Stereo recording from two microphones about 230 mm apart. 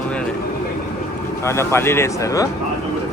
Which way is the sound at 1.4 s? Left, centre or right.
Centre.